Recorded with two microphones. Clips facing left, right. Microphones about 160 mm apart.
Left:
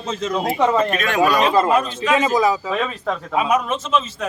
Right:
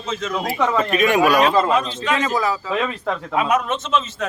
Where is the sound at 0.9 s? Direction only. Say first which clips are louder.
Right 2 dB; 10° right (ahead or behind).